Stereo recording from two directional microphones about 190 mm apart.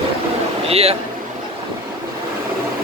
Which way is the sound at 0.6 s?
30° right (ahead or behind).